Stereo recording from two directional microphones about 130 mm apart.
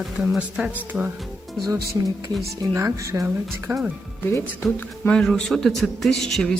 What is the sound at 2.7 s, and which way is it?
Speech, 25° right (ahead or behind).